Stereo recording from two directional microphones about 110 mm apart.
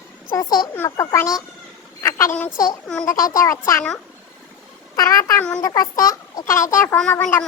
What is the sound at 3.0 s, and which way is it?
Speech, 30° left (ahead or behind).